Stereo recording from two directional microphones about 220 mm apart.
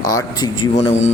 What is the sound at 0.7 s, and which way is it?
Speech, 30° left (ahead or behind).